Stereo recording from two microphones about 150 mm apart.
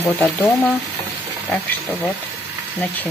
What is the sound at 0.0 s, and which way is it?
Speech, 15° left (ahead or behind).